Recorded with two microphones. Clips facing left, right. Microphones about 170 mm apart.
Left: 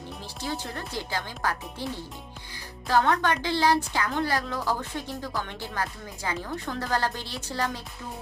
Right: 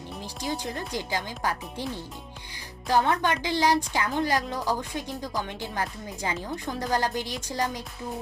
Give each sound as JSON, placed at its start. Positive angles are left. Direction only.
{"t": 0.4, "sound": "a woman's voice", "side_deg": -15}